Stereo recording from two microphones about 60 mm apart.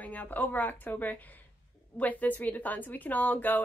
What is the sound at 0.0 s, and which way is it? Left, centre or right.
Speech, left.